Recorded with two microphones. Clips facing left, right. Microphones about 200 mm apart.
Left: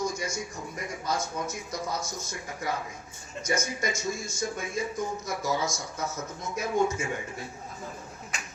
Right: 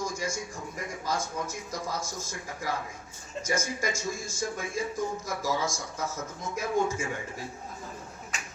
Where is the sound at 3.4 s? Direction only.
20° left (ahead or behind).